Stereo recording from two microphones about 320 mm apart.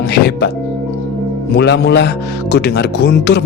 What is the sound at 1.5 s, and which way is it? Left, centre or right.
Speech, left.